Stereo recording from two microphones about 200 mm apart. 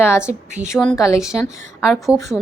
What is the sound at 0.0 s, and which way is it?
A woman's voice, 15° left (ahead or behind).